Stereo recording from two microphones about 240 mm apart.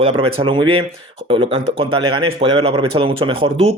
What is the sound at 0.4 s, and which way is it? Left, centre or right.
Speech, right.